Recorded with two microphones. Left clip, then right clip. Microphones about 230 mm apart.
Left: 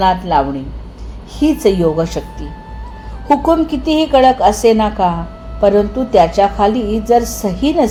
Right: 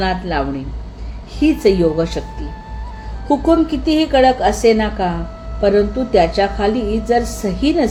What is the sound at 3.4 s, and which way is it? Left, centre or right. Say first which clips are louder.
A woman's voice: left 1 dB; left.